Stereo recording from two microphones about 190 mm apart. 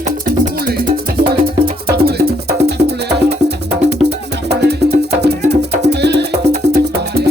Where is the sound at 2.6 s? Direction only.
60° right (ahead or behind).